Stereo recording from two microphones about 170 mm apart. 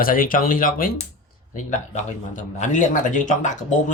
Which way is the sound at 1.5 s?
45° left (ahead or behind).